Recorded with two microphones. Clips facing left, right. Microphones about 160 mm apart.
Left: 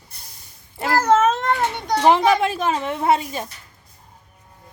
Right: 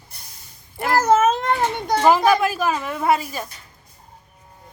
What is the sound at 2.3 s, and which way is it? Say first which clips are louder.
A woman's voice: even; 25° left (ahead or behind).